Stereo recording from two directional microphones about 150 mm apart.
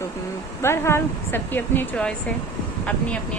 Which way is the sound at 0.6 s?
15° left (ahead or behind).